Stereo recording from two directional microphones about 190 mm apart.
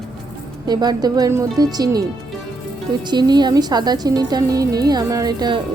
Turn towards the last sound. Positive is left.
turn(degrees=-20)  # may be behind; listen again after turning